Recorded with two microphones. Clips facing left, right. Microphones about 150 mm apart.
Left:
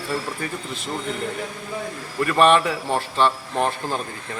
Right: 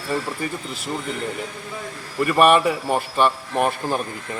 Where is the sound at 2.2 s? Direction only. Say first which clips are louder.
Right 1 dB; 10° right (ahead or behind).